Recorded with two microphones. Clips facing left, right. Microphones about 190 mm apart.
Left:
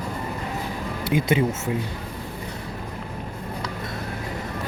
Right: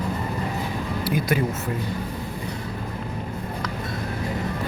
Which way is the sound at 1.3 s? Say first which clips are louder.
Left 3 dB; 25° left (ahead or behind).